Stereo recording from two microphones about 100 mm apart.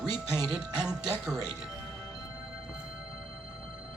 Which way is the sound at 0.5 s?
10° right (ahead or behind).